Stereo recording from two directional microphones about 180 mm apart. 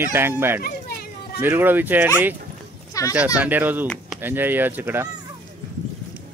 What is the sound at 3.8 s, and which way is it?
Speech, 5° left (ahead or behind).